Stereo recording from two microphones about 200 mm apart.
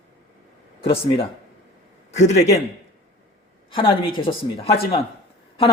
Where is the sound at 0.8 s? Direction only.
25° left (ahead or behind).